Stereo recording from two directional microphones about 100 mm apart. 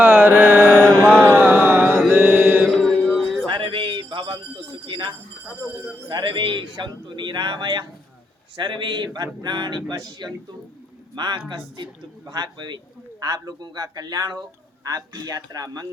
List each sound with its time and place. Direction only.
0.0 s mantra: 20° right (ahead or behind)
1.0 s a sound: 20° right (ahead or behind)
2.1 s mantra: 20° right (ahead or behind)
2.7 s music: 5° left (ahead or behind)
3.4 s music: 60° right (ahead or behind)
4.9 s a sound: 50° right (ahead or behind)
6.1 s a man's voice: 50° right (ahead or behind)